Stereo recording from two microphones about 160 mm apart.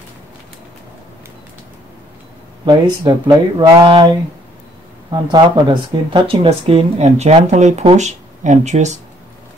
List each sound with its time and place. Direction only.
2.6 s speech: 30° right (ahead or behind); by 8.9 s 45° right (ahead or behind)